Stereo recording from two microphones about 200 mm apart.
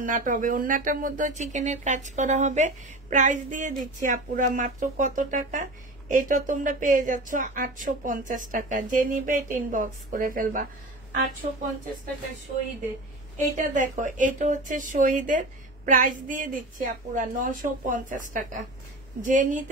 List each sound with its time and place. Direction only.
0.0 s speech: 40° right (ahead or behind)
13.6 s speech: 40° right (ahead or behind)